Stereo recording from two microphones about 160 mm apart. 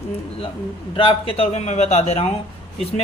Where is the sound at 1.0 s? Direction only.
35° left (ahead or behind).